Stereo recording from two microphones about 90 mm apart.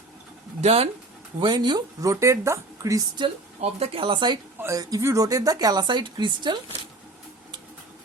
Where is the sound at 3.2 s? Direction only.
90° right; by 4.4 s 65° right (ahead or behind).